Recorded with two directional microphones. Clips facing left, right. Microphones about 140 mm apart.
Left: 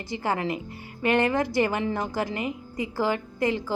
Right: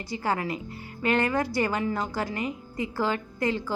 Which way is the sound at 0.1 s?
20° left (ahead or behind).